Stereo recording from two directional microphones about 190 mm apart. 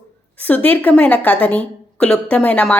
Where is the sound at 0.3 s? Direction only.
10° left (ahead or behind).